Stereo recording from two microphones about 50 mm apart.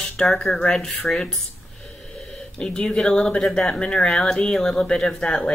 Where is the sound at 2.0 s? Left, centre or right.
Centre.